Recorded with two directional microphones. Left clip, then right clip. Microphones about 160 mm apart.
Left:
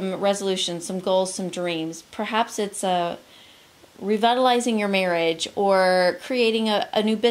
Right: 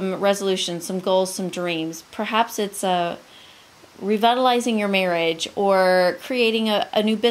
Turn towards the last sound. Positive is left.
turn(degrees=-5)  # may be behind; listen again after turning